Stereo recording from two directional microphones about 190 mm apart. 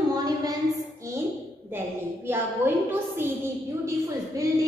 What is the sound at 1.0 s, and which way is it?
A woman's voice, 15° right (ahead or behind).